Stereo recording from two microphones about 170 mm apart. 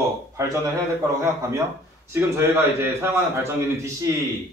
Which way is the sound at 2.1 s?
15° right (ahead or behind).